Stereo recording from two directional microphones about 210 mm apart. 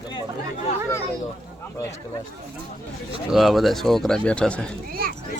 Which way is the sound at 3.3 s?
Centre (ahead or behind).